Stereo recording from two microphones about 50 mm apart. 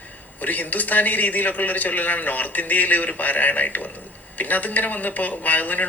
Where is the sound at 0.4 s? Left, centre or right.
Left.